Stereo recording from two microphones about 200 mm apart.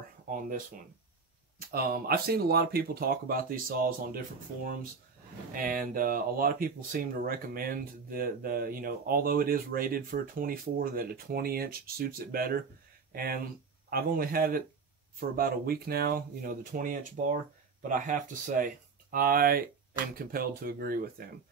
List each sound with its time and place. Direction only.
0.3 s speech: 40° right (ahead or behind)
1.7 s speech: 50° right (ahead or behind)
5.5 s speech: 45° right (ahead or behind)